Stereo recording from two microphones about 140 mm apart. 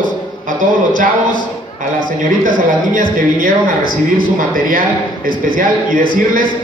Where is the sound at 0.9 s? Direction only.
75° right (ahead or behind).